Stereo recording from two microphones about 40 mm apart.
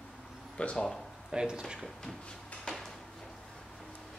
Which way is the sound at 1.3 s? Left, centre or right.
Centre.